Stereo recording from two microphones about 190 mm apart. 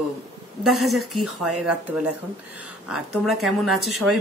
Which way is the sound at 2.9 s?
Centre (ahead or behind).